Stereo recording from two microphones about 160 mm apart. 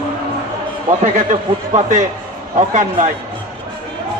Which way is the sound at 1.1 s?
50° right (ahead or behind).